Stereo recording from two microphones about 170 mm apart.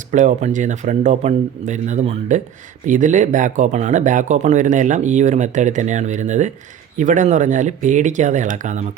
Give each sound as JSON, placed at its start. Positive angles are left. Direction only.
{"t": 0.1, "sound": "speech", "side_deg": -45}